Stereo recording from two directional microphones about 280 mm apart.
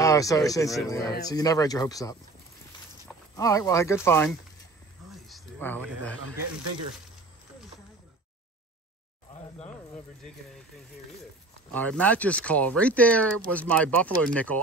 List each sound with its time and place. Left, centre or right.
0.0 s speech: centre
3.3 s speech: centre
5.1 s a sound: centre
11.7 s speech: centre